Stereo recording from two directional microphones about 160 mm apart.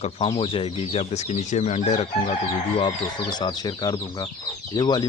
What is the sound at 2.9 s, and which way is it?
Speech, 25° left (ahead or behind).